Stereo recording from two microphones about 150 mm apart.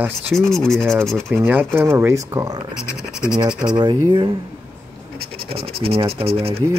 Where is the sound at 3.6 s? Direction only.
30° right (ahead or behind).